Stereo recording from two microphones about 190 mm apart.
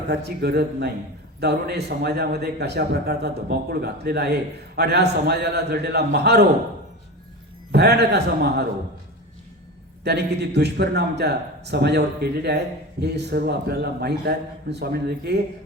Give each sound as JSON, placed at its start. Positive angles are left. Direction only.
{"t": 0.1, "sound": "a man's voice", "side_deg": -60}
{"t": 7.7, "sound": "a man's voice", "side_deg": -60}
{"t": 10.0, "sound": "a man's voice", "side_deg": -60}